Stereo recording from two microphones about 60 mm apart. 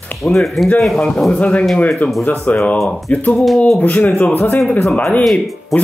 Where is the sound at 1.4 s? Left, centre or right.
Left.